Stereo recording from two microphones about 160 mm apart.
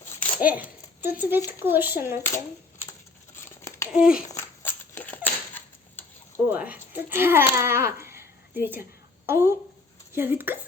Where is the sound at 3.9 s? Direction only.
5° right (ahead or behind).